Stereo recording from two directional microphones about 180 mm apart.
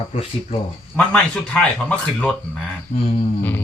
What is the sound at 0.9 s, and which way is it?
Speech, 5° left (ahead or behind).